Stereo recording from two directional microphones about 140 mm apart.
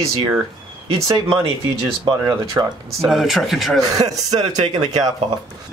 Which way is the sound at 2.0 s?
25° right (ahead or behind).